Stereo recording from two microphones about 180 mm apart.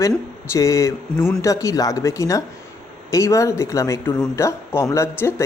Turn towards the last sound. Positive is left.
turn(degrees=10)  # may be behind; listen again after turning